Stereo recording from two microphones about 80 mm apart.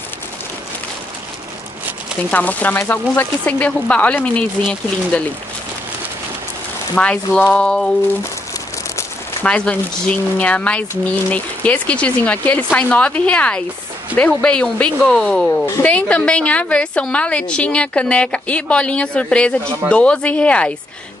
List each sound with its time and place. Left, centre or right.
2.3 s a woman's voice: left
7.0 s a woman's voice: centre
9.4 s a woman's voice: centre